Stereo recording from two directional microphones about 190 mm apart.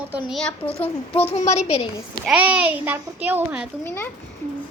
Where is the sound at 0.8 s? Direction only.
10° left (ahead or behind).